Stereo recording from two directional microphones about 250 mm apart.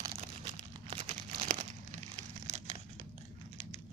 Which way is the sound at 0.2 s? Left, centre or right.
Right.